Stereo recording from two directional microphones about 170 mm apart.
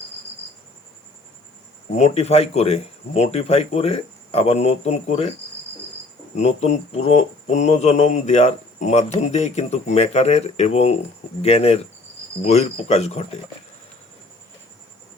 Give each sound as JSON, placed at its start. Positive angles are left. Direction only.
{"t": 2.0, "sound": "speech", "side_deg": 40}
{"t": 6.3, "sound": "speech", "side_deg": 40}